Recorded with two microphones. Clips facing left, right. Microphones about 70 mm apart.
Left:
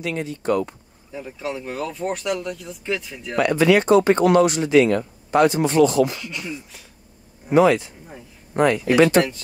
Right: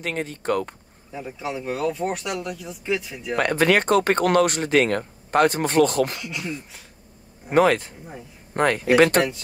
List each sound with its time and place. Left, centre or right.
0.0 s speech: right
1.1 s speech: centre
3.3 s speech: right
6.2 s speech: centre
7.4 s speech: right